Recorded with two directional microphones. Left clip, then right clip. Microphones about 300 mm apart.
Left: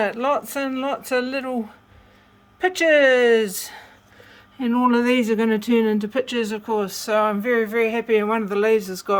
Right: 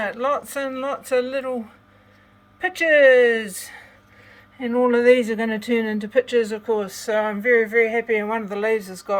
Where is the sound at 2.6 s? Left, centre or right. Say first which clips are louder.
Even; centre.